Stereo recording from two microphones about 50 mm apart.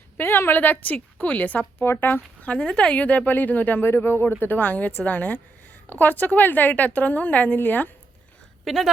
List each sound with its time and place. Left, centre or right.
0.2 s a woman's voice: left
2.4 s speech: left
3.0 s a woman's voice: left
3.8 s a woman's voice: left
8.6 s speech: centre